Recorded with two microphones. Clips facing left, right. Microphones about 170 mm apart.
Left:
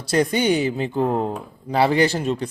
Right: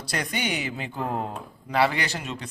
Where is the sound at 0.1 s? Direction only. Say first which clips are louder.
Left 11 dB; 30° left (ahead or behind).